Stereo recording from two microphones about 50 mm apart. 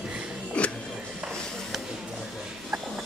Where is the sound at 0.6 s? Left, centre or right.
Left.